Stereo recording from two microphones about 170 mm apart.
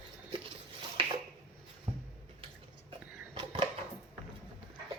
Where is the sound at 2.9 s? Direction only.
30° right (ahead or behind).